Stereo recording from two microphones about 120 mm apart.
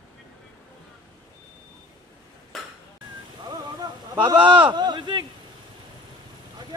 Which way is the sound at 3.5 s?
35° right (ahead or behind).